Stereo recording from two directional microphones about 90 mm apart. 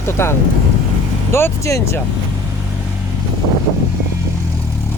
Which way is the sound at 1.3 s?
30° left (ahead or behind).